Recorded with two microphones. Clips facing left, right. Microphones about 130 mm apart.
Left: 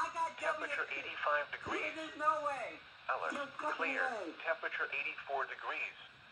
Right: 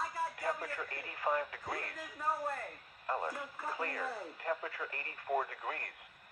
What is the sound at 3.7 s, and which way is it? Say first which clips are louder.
Speech: right 1 dB; 40° right (ahead or behind).